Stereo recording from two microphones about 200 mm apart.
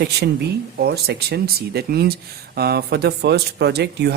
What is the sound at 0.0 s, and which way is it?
Speech, 55° right (ahead or behind).